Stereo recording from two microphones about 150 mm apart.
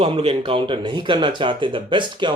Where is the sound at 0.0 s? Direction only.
40° right (ahead or behind).